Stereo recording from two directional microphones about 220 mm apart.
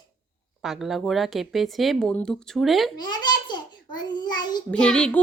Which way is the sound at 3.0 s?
20° left (ahead or behind).